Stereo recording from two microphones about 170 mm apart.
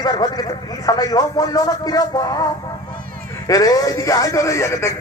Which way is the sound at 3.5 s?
20° left (ahead or behind).